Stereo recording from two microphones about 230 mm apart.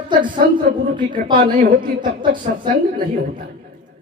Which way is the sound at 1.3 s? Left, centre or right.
Right.